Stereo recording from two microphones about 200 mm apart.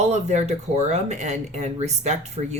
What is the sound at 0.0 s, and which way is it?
Speech, 35° right (ahead or behind).